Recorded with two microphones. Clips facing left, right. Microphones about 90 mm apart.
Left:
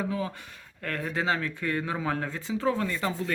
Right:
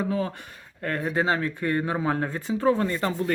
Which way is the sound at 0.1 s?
45° right (ahead or behind).